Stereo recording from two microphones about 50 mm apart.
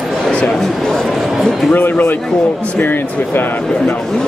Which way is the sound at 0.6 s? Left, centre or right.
Centre.